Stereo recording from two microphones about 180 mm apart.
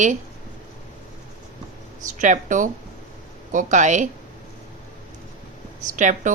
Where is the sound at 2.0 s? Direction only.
45° right (ahead or behind).